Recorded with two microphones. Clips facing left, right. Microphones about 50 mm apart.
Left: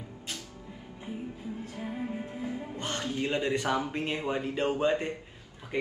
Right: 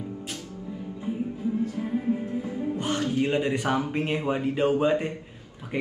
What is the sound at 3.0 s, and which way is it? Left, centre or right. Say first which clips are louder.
A man's voice: right 4 dB; right.